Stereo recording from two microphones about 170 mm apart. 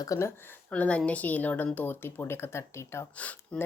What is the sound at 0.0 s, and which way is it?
A woman's voice, 20° left (ahead or behind).